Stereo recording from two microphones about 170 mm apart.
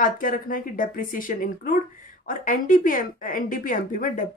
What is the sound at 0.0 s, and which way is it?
Speech, 55° left (ahead or behind).